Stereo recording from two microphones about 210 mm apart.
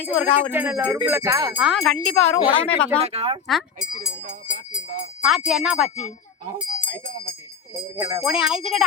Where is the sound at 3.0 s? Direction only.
30° right (ahead or behind).